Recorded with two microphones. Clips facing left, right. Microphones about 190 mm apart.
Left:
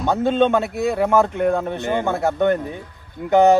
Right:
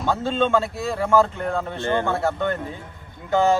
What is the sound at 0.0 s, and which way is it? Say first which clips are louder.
A man's voice: left 5 dB; 20° left (ahead or behind).